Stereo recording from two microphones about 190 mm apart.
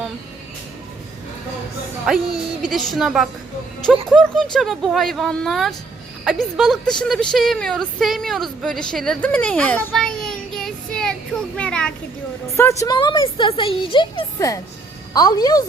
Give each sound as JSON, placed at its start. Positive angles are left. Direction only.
{"t": 2.1, "sound": "a woman's voice", "side_deg": -5}
{"t": 12.5, "sound": "a woman's voice", "side_deg": 15}